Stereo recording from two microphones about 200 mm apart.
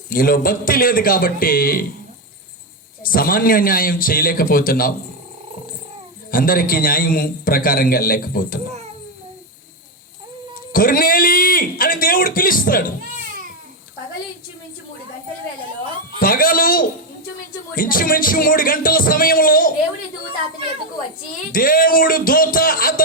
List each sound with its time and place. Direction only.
0.1 s a man's voice: 45° left (ahead or behind)
3.0 s a man's voice: 45° left (ahead or behind)
6.3 s a man's voice: 45° left (ahead or behind)
10.7 s a man's voice: 45° left (ahead or behind)
16.2 s a man's voice: 45° left (ahead or behind)
21.5 s a man's voice: 45° left (ahead or behind)